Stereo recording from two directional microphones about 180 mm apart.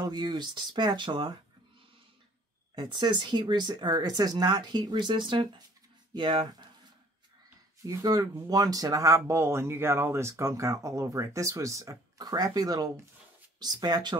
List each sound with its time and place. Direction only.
0.0 s speech: 20° right (ahead or behind)
2.7 s speech: 25° right (ahead or behind)
7.8 s speech: 20° right (ahead or behind)